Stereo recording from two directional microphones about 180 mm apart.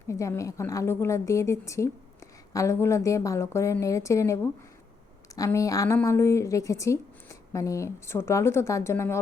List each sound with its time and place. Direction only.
0.1 s speech: 15° left (ahead or behind)